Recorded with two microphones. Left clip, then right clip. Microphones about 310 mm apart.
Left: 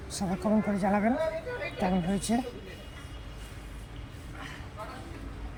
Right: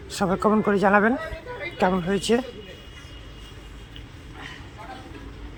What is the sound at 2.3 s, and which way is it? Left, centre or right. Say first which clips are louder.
Speech: right 9 dB; centre.